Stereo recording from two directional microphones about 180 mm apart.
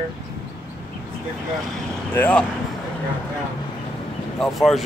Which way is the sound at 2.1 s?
10° left (ahead or behind).